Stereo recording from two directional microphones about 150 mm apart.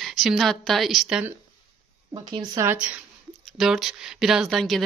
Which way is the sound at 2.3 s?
30° right (ahead or behind).